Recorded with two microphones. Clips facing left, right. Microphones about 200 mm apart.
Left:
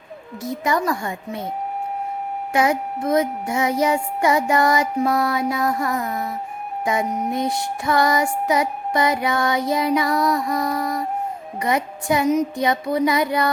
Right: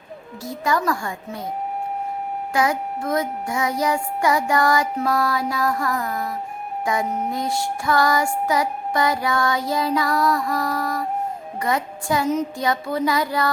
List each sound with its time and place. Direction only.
0.5 s music: 20° left (ahead or behind)
2.5 s music: 25° left (ahead or behind)